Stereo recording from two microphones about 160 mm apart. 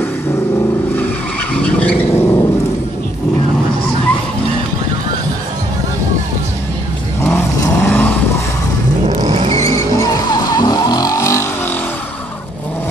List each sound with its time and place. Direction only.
1.5 s vehicle: 10° left (ahead or behind)
7.2 s vehicle: 15° left (ahead or behind)
9.2 s vehicle: 35° right (ahead or behind)
9.7 s vehicle: 20° left (ahead or behind)